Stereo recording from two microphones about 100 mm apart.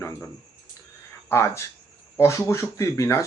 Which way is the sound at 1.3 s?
25° left (ahead or behind).